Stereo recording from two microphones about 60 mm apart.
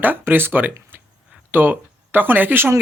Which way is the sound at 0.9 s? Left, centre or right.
Right.